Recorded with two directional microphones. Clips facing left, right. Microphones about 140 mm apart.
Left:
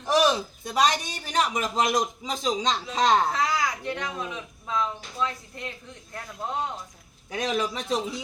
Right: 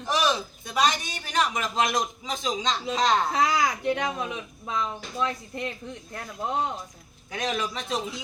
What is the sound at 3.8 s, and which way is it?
Speech, 15° right (ahead or behind).